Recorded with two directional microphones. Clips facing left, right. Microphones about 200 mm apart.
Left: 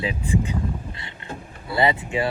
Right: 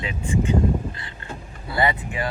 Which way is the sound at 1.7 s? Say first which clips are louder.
Left 2 dB; 25° left (ahead or behind).